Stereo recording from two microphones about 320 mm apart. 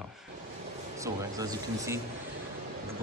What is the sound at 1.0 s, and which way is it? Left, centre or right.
Speech, centre.